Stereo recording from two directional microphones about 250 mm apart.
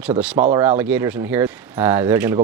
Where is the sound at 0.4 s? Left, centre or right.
Centre.